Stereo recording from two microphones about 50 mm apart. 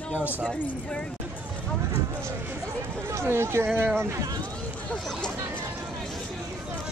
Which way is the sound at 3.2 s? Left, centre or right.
Right.